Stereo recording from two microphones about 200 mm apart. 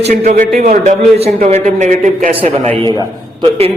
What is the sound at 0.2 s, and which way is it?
A man's voice, 40° right (ahead or behind).